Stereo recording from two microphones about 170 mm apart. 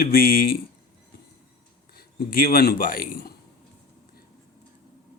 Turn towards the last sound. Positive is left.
turn(degrees=60)  # may be behind; listen again after turning